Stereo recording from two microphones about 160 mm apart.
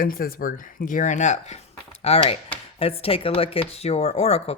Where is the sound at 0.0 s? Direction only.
65° left (ahead or behind).